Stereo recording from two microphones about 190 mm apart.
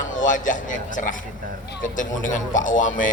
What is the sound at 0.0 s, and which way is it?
A man's voice, 45° left (ahead or behind).